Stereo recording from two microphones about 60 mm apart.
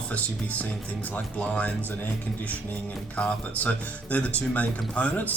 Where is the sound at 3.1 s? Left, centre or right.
Left.